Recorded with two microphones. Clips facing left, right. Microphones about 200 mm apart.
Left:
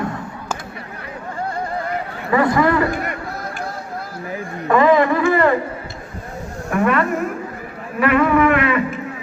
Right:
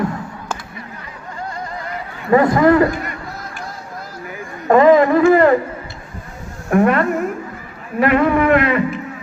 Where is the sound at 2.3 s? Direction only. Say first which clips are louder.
Right 4 dB; 45° right (ahead or behind).